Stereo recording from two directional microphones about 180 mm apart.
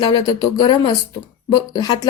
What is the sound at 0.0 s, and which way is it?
A woman's voice, 20° left (ahead or behind).